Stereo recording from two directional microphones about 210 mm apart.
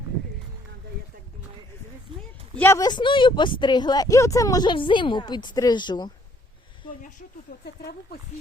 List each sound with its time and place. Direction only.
2.6 s speech: 15° left (ahead or behind)